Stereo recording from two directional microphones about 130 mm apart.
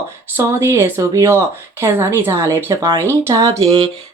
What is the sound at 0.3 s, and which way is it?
Speech, 20° right (ahead or behind).